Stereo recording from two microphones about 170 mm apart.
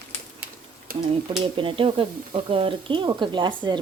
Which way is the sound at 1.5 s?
30° right (ahead or behind).